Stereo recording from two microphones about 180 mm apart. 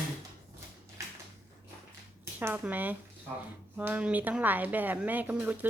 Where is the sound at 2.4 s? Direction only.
10° right (ahead or behind).